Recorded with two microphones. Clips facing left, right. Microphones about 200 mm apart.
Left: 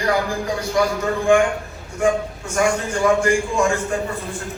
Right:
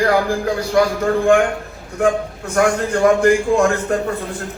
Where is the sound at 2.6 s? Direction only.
60° right (ahead or behind).